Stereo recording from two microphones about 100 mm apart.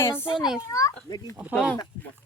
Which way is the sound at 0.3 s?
5° right (ahead or behind).